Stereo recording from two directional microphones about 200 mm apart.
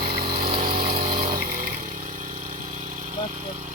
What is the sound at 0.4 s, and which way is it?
Pump, 25° right (ahead or behind).